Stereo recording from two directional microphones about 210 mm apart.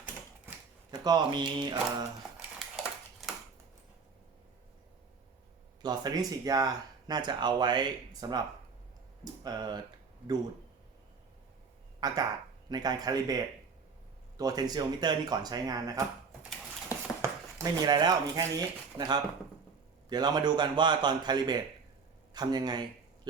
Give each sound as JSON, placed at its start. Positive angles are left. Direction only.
{"t": 0.9, "sound": "speech", "side_deg": -20}
{"t": 5.8, "sound": "speech", "side_deg": -20}
{"t": 9.4, "sound": "speech", "side_deg": -20}
{"t": 11.9, "sound": "speech", "side_deg": -20}
{"t": 17.2, "sound": "speech", "side_deg": -15}